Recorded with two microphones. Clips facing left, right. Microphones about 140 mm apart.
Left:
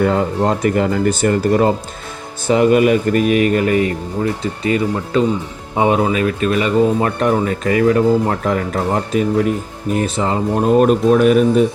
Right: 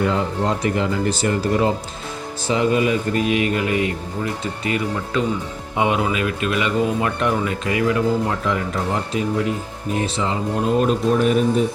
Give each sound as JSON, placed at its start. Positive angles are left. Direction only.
{"t": 0.0, "sound": "speech", "side_deg": 50}
{"t": 2.5, "sound": "speech", "side_deg": 60}
{"t": 4.6, "sound": "speech", "side_deg": 30}